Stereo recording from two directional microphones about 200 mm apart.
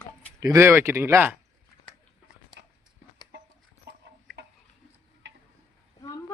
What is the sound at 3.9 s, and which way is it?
Chicken, 55° right (ahead or behind).